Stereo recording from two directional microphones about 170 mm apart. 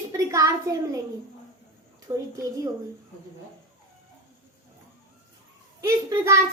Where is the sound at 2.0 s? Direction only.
20° right (ahead or behind).